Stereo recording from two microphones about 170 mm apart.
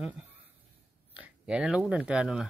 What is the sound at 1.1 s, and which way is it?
Speech, 5° right (ahead or behind).